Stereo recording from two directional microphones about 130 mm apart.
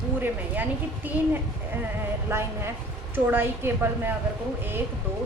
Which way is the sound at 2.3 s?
20° right (ahead or behind).